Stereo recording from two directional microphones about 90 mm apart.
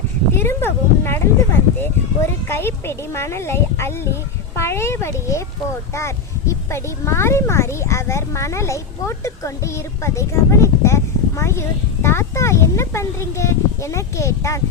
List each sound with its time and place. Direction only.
0.3 s speech: 25° left (ahead or behind)
6.5 s speech: 30° left (ahead or behind)